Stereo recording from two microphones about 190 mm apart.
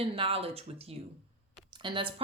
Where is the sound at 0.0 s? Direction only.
30° right (ahead or behind).